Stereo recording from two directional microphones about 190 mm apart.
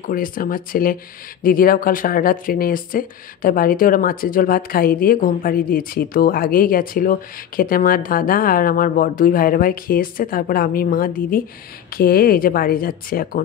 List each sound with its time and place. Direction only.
0.0 s speech: 50° left (ahead or behind)